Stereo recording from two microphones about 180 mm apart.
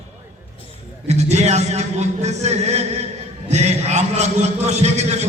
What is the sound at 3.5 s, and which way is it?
A man's voice, 40° right (ahead or behind).